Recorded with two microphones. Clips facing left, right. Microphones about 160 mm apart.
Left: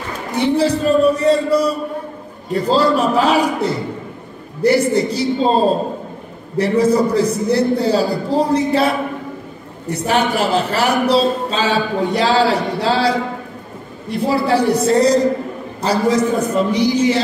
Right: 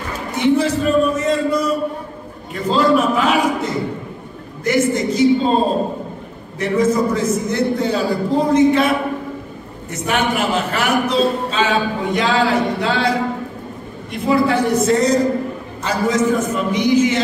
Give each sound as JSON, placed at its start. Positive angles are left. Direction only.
{"t": 0.3, "sound": "a man's voice", "side_deg": 35}
{"t": 6.6, "sound": "a man's voice", "side_deg": 35}
{"t": 14.1, "sound": "a man's voice", "side_deg": 35}